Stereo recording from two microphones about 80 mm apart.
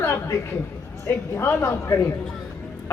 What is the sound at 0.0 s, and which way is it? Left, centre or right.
Chatter, left.